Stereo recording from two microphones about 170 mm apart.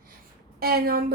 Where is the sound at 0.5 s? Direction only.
65° right (ahead or behind).